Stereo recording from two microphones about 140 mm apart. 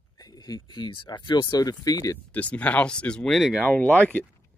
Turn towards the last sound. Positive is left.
turn(degrees=10)  # may be behind; listen again after turning